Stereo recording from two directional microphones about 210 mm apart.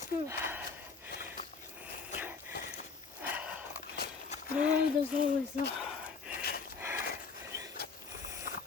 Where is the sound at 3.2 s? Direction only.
5° right (ahead or behind).